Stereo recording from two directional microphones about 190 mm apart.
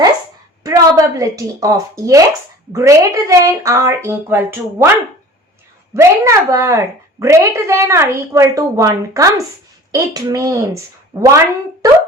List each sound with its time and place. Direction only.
0.6 s a woman's voice: 20° right (ahead or behind)
5.9 s a woman's voice: 15° right (ahead or behind)
11.8 s a sound: 20° right (ahead or behind)